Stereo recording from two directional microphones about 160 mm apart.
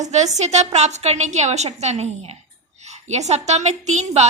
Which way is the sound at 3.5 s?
45° right (ahead or behind).